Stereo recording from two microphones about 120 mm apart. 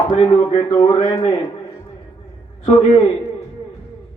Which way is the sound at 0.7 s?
40° left (ahead or behind).